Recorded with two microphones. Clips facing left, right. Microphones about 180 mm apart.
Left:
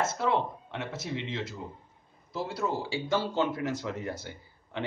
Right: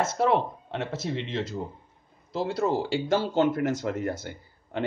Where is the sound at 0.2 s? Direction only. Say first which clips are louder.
Right 5 dB; 65° right (ahead or behind).